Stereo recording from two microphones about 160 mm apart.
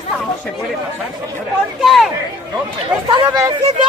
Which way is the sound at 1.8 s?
Centre (ahead or behind).